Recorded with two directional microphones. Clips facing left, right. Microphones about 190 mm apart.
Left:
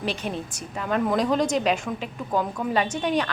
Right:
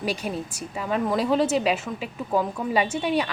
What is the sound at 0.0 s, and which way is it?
Speech, 10° right (ahead or behind).